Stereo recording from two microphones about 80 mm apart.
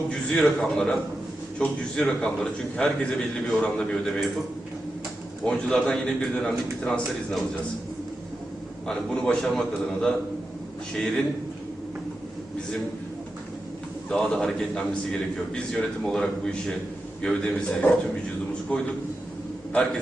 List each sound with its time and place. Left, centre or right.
0.3 s a man's voice: centre
5.5 s a man's voice: centre
8.9 s a man's voice: centre
14.1 s a man's voice: centre